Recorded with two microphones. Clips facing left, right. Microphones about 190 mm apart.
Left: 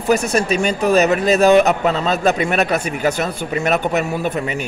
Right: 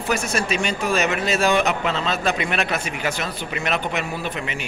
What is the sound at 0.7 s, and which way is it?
A man's voice, 40° left (ahead or behind).